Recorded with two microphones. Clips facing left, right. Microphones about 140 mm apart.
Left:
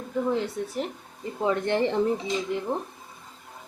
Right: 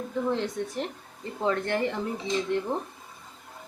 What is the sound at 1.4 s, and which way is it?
Speech, 15° left (ahead or behind).